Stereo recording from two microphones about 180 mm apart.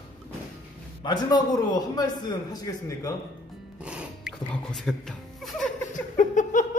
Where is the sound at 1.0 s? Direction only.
25° left (ahead or behind).